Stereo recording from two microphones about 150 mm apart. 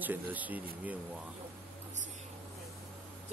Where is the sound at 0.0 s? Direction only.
10° right (ahead or behind).